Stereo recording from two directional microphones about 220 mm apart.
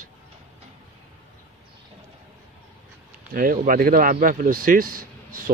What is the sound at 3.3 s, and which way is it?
Speech, 40° right (ahead or behind).